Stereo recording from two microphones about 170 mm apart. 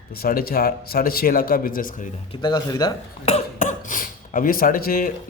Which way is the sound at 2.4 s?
25° left (ahead or behind).